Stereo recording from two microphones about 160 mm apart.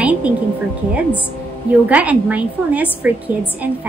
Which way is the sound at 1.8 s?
10° right (ahead or behind).